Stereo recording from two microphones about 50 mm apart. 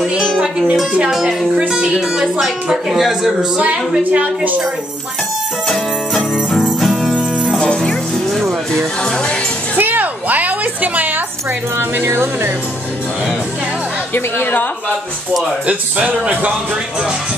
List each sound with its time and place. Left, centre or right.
2.0 s speech: centre
3.5 s a woman's voice: centre
4.0 s a woman's voice: right
6.8 s music: centre
7.5 s music: centre
9.0 s music: centre
9.8 s a sound: right
12.1 s speech: right
14.1 s a woman's voice: left
15.6 s a woman's voice: right